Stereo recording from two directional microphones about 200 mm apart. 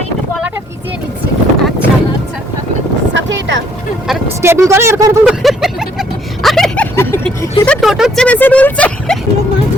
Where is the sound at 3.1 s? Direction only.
70° right (ahead or behind).